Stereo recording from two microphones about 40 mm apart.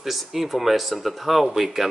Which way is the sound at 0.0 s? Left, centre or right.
Centre.